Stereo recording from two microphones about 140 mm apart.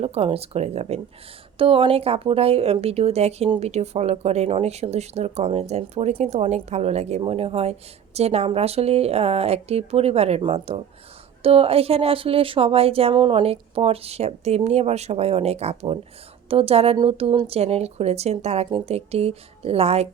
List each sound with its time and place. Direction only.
0.0 s speech: 45° right (ahead or behind)